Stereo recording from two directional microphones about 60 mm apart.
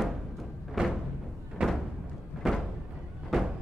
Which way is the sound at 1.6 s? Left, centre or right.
Centre.